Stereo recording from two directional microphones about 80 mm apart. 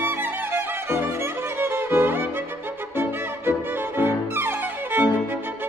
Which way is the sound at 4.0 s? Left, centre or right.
Right.